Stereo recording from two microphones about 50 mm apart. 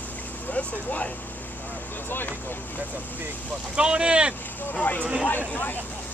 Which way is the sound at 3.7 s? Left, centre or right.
Centre.